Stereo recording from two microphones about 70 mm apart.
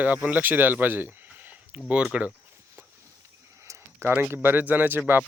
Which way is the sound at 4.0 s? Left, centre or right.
Right.